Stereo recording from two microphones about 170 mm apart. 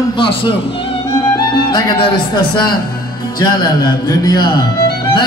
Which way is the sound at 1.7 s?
30° left (ahead or behind).